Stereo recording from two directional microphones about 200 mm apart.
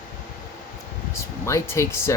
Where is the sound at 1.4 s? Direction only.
15° left (ahead or behind).